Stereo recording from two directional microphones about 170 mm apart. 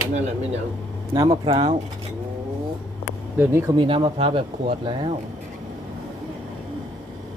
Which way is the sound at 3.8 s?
30° right (ahead or behind).